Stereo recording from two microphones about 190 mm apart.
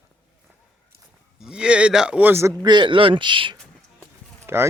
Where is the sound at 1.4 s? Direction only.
5° right (ahead or behind).